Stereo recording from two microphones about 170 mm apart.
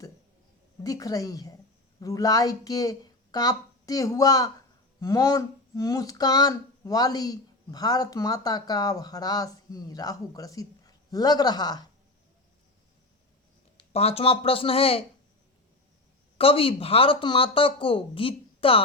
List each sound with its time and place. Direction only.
0.9 s speech: 20° left (ahead or behind)
13.7 s speech: 35° left (ahead or behind)
16.4 s speech: 35° left (ahead or behind)